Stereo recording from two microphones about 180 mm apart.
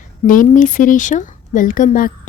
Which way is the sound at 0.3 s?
45° left (ahead or behind).